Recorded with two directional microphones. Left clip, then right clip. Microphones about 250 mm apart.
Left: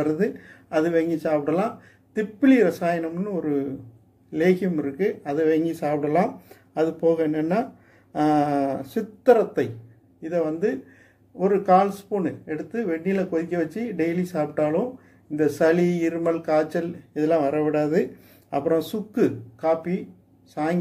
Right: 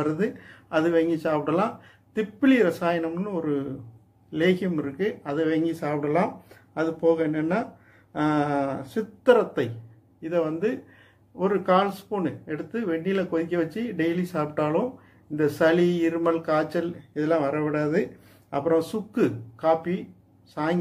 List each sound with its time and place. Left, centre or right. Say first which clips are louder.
0.0 s speech: left 3 dB; centre